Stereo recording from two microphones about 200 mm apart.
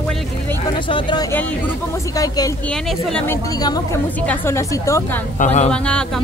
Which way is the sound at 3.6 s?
20° left (ahead or behind).